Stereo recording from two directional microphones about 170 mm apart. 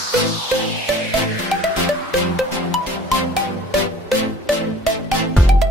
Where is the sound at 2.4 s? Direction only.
Centre (ahead or behind).